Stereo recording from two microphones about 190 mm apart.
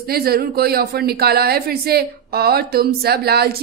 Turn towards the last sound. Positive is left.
turn(degrees=-55)  # may be behind; listen again after turning